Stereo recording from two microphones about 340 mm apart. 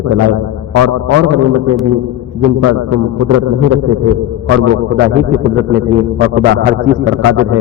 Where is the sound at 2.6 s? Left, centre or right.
Right.